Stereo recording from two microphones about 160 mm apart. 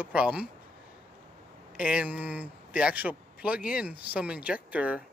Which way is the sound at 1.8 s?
5° right (ahead or behind).